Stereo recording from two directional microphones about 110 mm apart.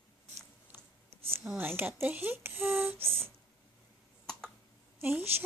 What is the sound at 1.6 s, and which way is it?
Speech, 20° right (ahead or behind).